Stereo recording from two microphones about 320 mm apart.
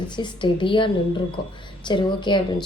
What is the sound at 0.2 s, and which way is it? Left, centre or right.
A woman's voice, centre.